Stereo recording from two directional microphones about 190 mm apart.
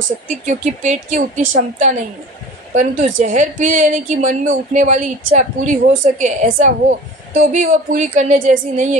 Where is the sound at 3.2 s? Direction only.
40° right (ahead or behind).